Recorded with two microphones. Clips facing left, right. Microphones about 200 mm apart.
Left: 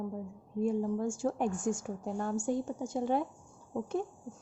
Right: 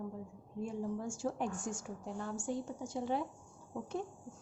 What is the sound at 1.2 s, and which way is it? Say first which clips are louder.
A woman's voice: left 5 dB; 50° left (ahead or behind).